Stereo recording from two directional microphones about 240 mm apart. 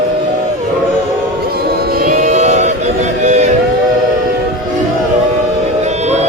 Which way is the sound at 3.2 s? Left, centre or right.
Right.